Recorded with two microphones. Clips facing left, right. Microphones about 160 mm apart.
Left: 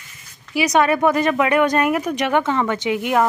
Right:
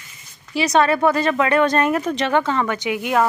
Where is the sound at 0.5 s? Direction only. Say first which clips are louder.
Even; 15° left (ahead or behind).